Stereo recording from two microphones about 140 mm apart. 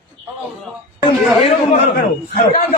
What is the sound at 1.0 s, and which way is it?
Speech, 40° left (ahead or behind).